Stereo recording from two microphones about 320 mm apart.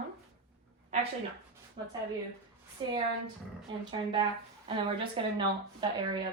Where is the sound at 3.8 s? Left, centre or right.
Centre.